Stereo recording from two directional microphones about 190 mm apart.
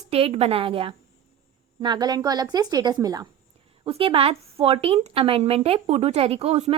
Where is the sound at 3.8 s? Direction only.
30° right (ahead or behind).